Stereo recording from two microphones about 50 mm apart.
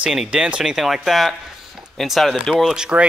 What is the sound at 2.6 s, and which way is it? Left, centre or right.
Speech, centre.